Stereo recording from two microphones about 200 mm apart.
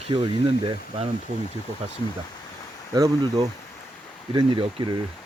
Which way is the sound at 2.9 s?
20° right (ahead or behind).